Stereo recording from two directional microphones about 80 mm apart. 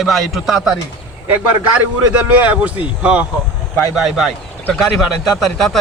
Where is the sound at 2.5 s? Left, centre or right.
Centre.